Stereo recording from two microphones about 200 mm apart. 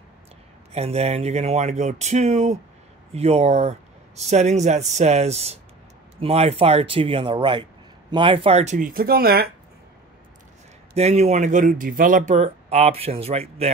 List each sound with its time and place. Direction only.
0.7 s speech: 30° right (ahead or behind); by 9.5 s 50° right (ahead or behind)
11.0 s speech: 35° right (ahead or behind)